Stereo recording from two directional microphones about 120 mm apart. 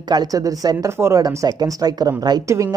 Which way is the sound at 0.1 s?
30° right (ahead or behind).